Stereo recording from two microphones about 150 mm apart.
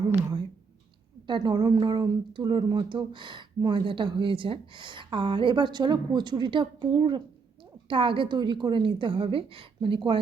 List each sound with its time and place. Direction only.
1.3 s speech: 30° right (ahead or behind)